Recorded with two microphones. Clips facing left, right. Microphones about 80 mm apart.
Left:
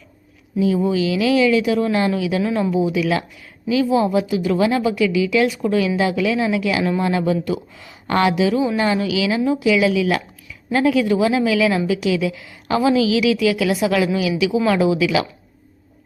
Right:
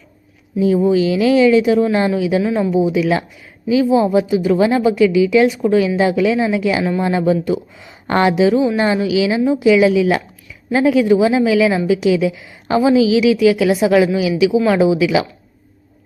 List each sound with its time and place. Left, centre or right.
0.9 s speech: right
2.4 s speech: centre
2.7 s speech: right